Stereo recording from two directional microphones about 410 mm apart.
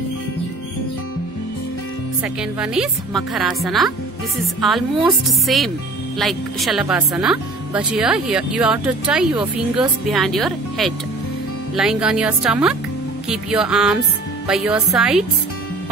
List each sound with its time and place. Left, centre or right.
2.2 s speech: centre